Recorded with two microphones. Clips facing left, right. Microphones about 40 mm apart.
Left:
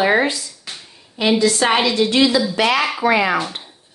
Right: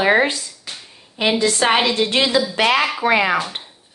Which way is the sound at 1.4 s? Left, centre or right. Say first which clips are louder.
Right 1 dB; right.